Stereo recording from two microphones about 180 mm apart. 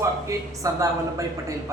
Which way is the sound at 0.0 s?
20° right (ahead or behind).